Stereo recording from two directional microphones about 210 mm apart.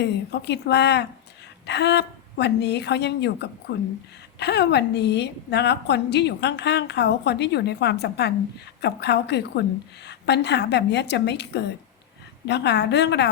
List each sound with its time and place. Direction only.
0.0 s a woman's voice: 55° left (ahead or behind)